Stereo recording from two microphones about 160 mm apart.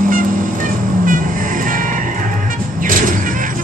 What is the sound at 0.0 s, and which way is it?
Vehicle, 55° right (ahead or behind).